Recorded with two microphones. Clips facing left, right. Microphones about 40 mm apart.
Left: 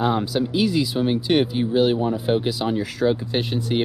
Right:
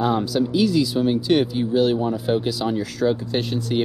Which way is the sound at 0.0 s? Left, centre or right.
Centre.